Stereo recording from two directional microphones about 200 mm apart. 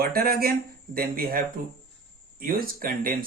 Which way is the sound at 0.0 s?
50° right (ahead or behind).